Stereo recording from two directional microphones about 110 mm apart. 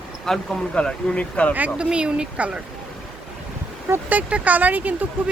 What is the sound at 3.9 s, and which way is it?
Speech, 15° right (ahead or behind).